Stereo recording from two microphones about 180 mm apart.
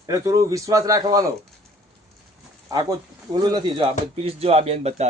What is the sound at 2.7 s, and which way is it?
Speech, 20° right (ahead or behind).